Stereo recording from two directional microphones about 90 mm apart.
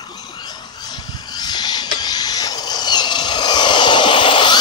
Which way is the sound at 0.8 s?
50° left (ahead or behind).